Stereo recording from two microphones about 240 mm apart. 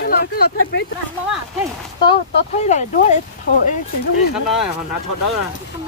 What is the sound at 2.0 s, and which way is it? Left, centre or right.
Speech, left.